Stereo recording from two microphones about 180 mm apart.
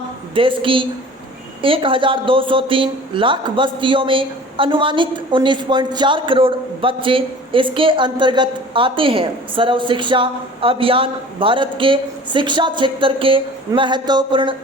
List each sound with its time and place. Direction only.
0.3 s speech: 30° right (ahead or behind)